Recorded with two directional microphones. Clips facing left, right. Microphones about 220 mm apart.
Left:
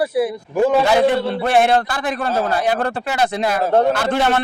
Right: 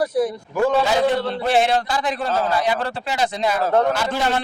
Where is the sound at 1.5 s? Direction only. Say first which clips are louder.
Left 3 dB; 55° left (ahead or behind).